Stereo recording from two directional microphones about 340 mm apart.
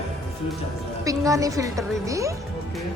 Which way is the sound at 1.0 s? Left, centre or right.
Centre.